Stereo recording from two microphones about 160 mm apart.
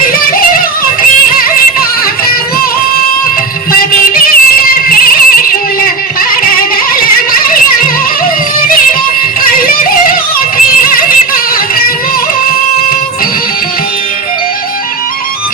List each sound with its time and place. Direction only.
0.0 s music: 65° left (ahead or behind)
3.7 s music: 65° left (ahead or behind)